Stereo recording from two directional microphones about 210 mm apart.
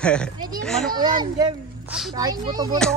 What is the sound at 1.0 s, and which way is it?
Speech, 20° right (ahead or behind).